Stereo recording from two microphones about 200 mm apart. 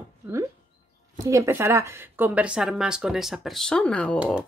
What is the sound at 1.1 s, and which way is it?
A woman's voice, 15° right (ahead or behind).